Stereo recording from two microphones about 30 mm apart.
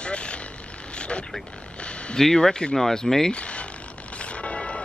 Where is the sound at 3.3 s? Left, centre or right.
Left.